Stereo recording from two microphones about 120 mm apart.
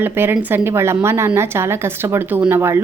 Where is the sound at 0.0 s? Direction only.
20° right (ahead or behind).